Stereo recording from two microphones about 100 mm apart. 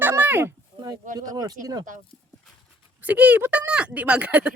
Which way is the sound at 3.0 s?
15° right (ahead or behind).